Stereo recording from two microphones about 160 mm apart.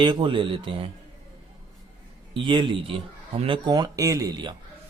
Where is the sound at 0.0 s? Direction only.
30° right (ahead or behind).